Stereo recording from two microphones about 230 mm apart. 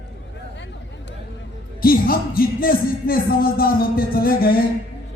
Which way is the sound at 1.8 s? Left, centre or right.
Left.